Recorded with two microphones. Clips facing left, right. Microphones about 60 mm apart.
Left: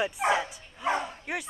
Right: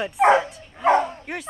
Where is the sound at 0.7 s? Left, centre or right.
Right.